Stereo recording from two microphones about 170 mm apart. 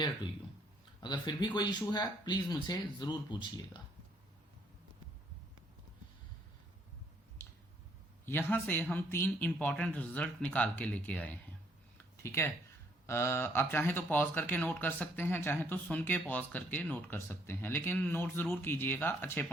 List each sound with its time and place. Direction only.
1.0 s speech: 25° left (ahead or behind)
8.2 s speech: 15° left (ahead or behind)
11.9 s a sound: 15° left (ahead or behind)
13.1 s speech: 15° left (ahead or behind)